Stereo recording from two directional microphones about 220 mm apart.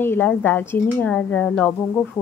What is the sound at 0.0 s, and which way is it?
A woman's voice, 10° left (ahead or behind).